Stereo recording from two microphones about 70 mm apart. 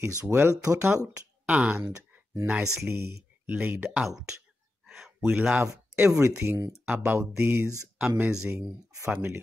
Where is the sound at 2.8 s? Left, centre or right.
Right.